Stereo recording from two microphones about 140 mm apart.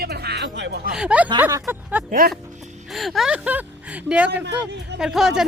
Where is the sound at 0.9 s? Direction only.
5° right (ahead or behind).